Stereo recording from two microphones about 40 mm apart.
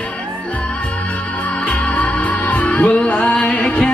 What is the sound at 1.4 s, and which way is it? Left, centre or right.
Music, left.